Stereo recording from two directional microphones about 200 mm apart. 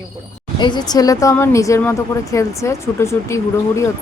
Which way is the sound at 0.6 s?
20° left (ahead or behind).